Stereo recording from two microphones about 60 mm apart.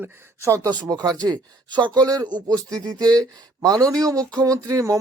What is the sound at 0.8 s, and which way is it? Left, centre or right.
Speech, right.